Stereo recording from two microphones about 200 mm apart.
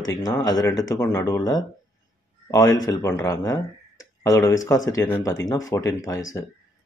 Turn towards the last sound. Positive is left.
turn(degrees=15)  # may be behind; listen again after turning